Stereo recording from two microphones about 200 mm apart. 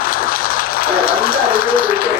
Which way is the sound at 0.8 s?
45° left (ahead or behind).